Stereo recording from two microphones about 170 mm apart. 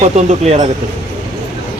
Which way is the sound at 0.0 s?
40° right (ahead or behind).